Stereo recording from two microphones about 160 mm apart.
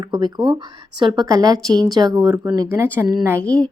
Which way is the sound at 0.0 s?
25° right (ahead or behind).